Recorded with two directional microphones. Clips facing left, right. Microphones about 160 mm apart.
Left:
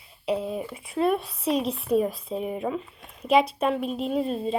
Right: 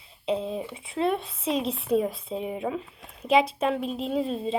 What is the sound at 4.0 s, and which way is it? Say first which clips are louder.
Speech: left 1 dB; 30° right (ahead or behind).